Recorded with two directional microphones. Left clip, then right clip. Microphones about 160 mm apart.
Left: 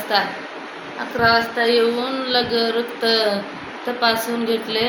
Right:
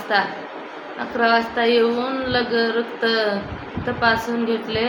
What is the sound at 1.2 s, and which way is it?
Speech, 45° right (ahead or behind).